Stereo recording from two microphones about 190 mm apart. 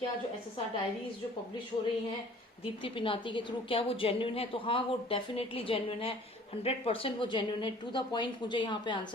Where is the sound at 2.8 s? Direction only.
25° left (ahead or behind).